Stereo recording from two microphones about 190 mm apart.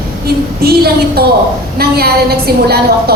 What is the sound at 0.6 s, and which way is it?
A woman's voice, 55° right (ahead or behind).